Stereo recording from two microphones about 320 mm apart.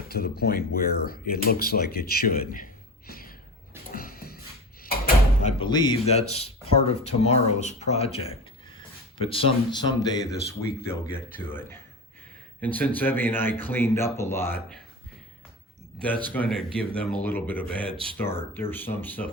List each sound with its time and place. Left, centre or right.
0.1 s speech: left
3.1 s a sound: left
4.8 s speech: left; by 10.2 s centre
12.5 s speech: centre
16.3 s speech: centre